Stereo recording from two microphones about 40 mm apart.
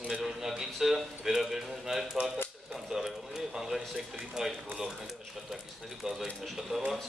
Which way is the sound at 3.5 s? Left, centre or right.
Centre.